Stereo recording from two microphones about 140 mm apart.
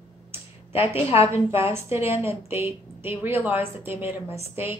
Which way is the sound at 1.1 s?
45° left (ahead or behind).